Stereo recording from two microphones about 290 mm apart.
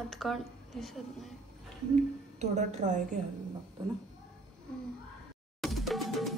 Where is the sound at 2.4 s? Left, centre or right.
Right.